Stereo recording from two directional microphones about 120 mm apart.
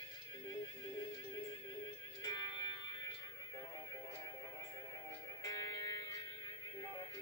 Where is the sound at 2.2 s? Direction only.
30° left (ahead or behind).